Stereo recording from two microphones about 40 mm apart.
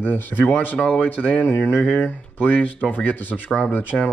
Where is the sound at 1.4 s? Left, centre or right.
Left.